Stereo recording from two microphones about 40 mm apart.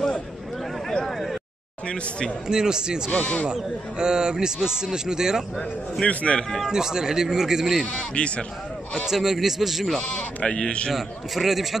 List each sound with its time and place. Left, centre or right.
1.9 s speech: left
2.4 s a man's voice: centre
3.1 s speech: left
4.0 s a man's voice: centre
6.0 s speech: left
6.7 s a man's voice: centre
7.8 s speech: left
9.0 s a man's voice: centre
10.0 s speech: left
10.9 s a man's voice: centre